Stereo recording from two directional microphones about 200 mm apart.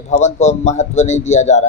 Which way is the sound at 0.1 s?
35° left (ahead or behind).